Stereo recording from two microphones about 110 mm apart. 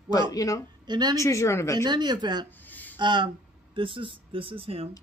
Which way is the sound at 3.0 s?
45° right (ahead or behind).